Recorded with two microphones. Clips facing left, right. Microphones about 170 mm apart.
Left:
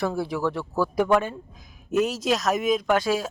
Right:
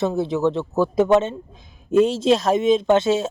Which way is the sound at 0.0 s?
20° right (ahead or behind).